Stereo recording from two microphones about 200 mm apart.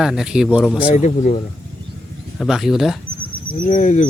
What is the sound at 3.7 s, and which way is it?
Speech, 35° left (ahead or behind).